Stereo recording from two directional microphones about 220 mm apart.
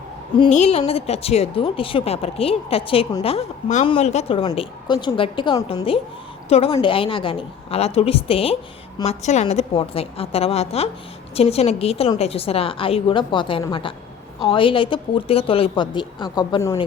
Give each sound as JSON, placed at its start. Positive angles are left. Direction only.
{"t": 0.3, "sound": "a woman's voice", "side_deg": 25}